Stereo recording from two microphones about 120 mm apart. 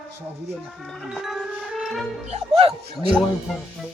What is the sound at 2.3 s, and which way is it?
Speech, 55° right (ahead or behind).